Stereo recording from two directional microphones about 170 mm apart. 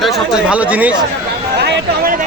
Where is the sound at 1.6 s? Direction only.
65° right (ahead or behind).